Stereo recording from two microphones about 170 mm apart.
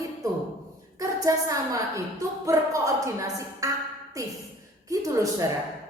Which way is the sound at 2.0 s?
20° right (ahead or behind).